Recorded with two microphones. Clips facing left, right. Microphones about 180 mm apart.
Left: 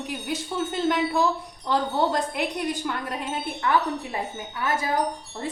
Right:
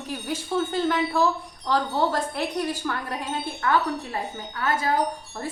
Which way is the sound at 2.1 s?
20° left (ahead or behind).